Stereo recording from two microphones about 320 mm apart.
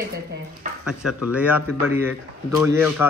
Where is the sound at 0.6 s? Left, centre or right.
Right.